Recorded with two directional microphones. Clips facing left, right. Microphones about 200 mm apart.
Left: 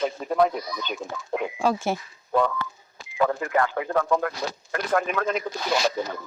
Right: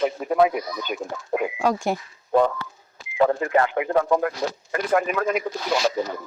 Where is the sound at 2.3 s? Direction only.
40° right (ahead or behind).